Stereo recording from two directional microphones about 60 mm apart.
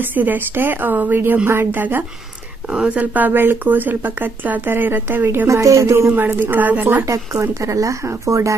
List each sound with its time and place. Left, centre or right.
0.0 s speech: right
2.7 s speech: right
5.5 s speech: right
6.0 s speech: right
7.1 s speech: right